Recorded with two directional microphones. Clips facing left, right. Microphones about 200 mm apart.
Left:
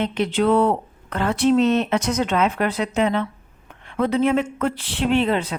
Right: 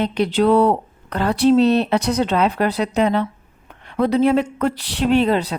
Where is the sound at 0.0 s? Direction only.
35° right (ahead or behind).